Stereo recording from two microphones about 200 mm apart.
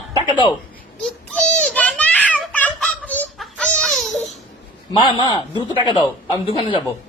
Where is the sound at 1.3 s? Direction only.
5° left (ahead or behind).